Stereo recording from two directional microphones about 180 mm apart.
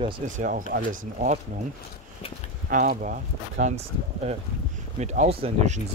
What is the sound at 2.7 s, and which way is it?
Speech, 50° right (ahead or behind).